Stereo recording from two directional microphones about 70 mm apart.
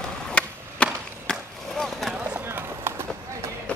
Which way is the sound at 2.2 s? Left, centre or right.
Right.